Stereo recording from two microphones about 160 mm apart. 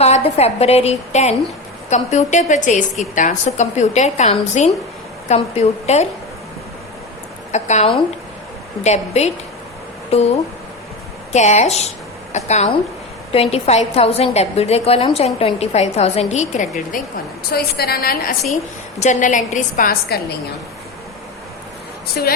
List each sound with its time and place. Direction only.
0.0 s a woman's voice: 40° left (ahead or behind)
7.5 s a woman's voice: 45° left (ahead or behind)
17.5 s a woman's voice: 75° left (ahead or behind)
18.9 s a woman's voice: 45° left (ahead or behind); by 20.4 s 80° left
22.2 s a woman's voice: 75° left (ahead or behind)